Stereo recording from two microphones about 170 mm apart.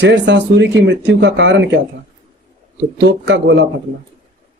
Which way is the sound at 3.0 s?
90° right.